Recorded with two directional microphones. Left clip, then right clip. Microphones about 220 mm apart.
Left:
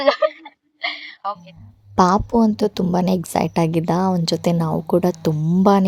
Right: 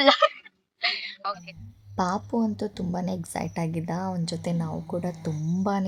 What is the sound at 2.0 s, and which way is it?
A woman's voice, 40° left (ahead or behind).